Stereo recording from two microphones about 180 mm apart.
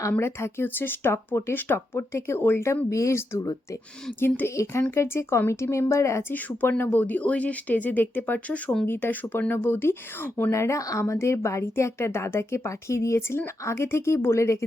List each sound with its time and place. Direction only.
0.0 s speech: 15° left (ahead or behind)